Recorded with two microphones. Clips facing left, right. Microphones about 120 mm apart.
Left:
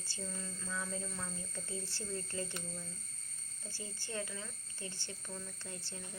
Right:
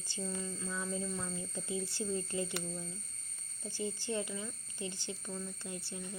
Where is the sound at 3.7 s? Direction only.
15° right (ahead or behind).